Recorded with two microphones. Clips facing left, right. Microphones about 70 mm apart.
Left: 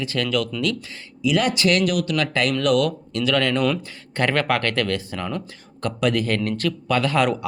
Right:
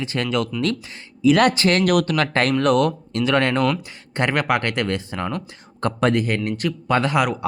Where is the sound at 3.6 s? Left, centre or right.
Centre.